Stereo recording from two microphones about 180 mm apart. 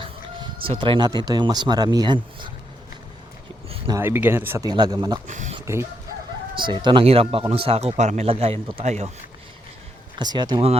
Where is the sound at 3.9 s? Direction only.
15° right (ahead or behind).